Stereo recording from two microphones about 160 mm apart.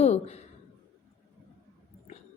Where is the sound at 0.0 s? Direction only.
40° left (ahead or behind).